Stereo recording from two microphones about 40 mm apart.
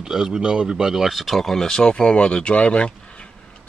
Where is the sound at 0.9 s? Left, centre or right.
Centre; by 3.2 s left.